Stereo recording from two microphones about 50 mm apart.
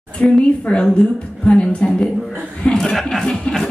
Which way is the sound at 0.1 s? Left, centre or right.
Left.